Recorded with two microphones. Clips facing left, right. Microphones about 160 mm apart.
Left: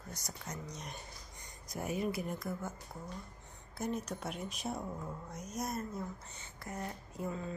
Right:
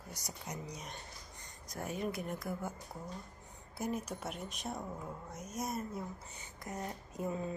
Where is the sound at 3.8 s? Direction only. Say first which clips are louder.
Even; 5° right (ahead or behind).